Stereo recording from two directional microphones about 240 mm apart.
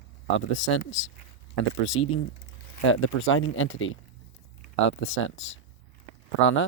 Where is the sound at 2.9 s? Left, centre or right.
Left.